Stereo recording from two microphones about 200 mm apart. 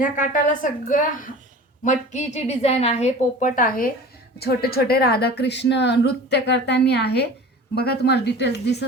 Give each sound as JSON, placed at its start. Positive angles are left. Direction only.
{"t": 0.0, "sound": "a woman's voice", "side_deg": 40}